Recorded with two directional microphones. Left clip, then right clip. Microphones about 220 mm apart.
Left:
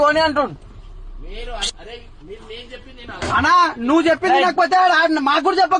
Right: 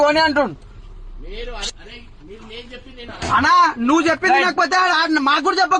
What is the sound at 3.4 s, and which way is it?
A man's voice, 50° right (ahead or behind).